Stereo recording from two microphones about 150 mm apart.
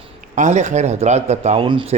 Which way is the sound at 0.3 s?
50° right (ahead or behind).